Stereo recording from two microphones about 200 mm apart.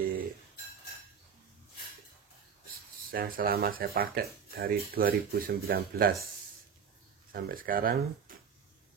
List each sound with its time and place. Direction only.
3.1 s speech: 45° right (ahead or behind)
7.3 s speech: 50° right (ahead or behind)